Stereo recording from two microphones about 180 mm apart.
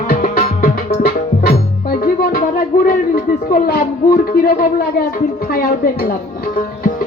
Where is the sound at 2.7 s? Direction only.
50° left (ahead or behind).